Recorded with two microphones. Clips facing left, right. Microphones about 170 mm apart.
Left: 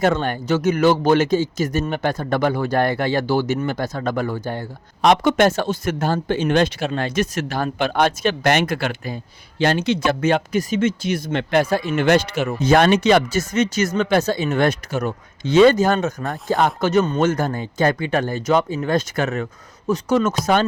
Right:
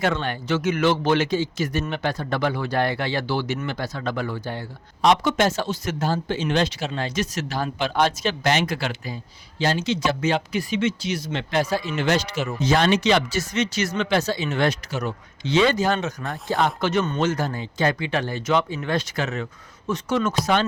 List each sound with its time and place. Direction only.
0.0 s speech: 45° left (ahead or behind)
19.9 s speech: 40° left (ahead or behind)